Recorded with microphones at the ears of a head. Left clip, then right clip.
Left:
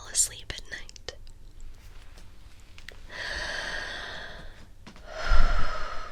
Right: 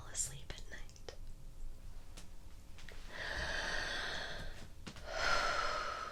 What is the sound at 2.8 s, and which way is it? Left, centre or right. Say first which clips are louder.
Gasp: left 8 dB; left.